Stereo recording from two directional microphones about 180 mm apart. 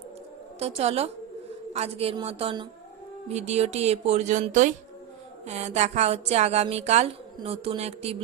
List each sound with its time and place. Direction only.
0.6 s a woman's voice: 35° right (ahead or behind)